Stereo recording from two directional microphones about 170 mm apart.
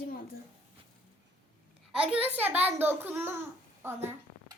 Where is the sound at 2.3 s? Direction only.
10° right (ahead or behind).